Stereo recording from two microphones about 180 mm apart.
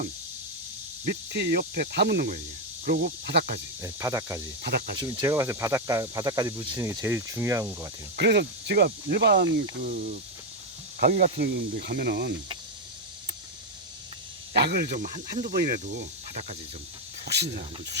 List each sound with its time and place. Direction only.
1.3 s speech: 65° right (ahead or behind)
3.8 s speech: 15° right (ahead or behind)
4.6 s speech: 60° right (ahead or behind)
4.9 s speech: 20° right (ahead or behind)
8.1 s speech: 65° right (ahead or behind)
9.8 s speech: 50° right (ahead or behind)
14.5 s speech: 65° right (ahead or behind)
14.9 s speech: 45° right (ahead or behind)
17.2 s speech: 70° right (ahead or behind)